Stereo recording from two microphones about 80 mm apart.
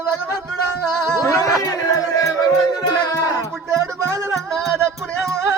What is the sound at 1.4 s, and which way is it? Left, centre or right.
Music, left.